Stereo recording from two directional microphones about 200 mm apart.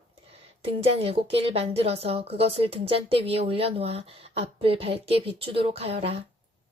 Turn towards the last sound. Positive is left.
turn(degrees=-30)  # may be behind; listen again after turning